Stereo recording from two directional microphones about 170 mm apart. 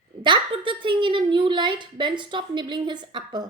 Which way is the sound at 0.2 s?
30° right (ahead or behind).